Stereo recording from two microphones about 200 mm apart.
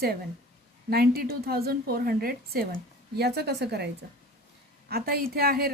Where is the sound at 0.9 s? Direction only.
50° right (ahead or behind).